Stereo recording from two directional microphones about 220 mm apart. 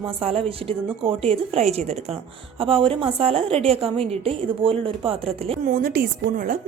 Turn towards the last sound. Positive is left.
turn(degrees=-40)  # may be behind; listen again after turning